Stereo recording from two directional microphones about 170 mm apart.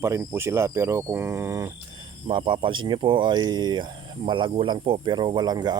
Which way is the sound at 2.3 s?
30° right (ahead or behind).